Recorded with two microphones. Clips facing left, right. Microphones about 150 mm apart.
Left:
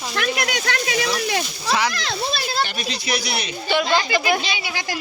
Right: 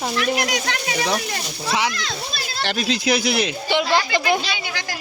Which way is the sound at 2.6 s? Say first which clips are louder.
Right 2 dB; 90° right.